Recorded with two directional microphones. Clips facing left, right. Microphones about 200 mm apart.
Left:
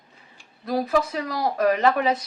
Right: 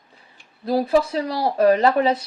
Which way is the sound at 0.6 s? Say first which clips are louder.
Right 4 dB; 30° right (ahead or behind).